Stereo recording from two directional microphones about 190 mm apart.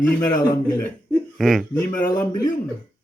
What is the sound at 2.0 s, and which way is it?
Speech, 45° left (ahead or behind).